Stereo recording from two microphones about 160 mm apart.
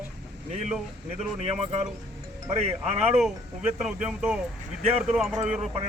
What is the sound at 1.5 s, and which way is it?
Speech, 40° right (ahead or behind).